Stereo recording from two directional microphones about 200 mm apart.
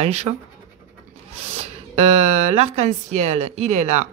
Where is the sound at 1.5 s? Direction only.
30° right (ahead or behind).